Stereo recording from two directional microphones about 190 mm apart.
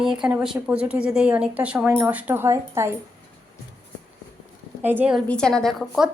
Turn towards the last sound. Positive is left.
turn(degrees=0)  # may be behind; listen again after turning